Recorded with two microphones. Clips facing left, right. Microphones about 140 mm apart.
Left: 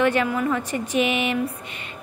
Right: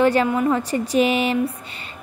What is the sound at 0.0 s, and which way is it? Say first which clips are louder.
A woman's voice: right 3 dB; 35° right (ahead or behind).